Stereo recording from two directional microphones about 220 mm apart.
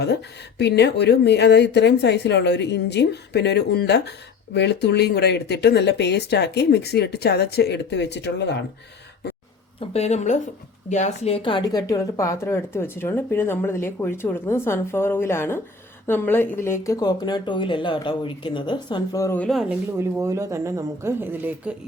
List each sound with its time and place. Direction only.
0.6 s speech: 50° left (ahead or behind)
9.9 s a woman's voice: 30° left (ahead or behind); by 19.5 s 10° left (ahead or behind)
19.5 s speech: centre (ahead or behind)
20.0 s speech: 15° right (ahead or behind)